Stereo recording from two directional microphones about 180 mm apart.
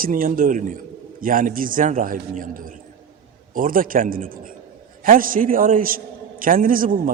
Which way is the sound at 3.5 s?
50° right (ahead or behind).